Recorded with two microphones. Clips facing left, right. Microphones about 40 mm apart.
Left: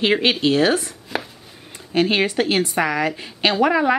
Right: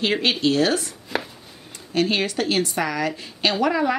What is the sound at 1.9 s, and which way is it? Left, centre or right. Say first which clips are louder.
Speech: left 3 dB; left.